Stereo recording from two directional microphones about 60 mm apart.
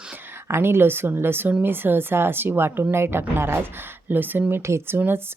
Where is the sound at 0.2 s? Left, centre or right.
Right.